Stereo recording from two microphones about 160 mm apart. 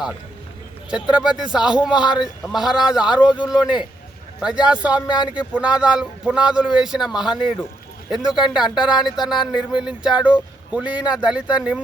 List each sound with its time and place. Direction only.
1.1 s a man's voice: 5° right (ahead or behind)
5.0 s speech: 25° left (ahead or behind)
5.5 s a man's voice: 5° right (ahead or behind)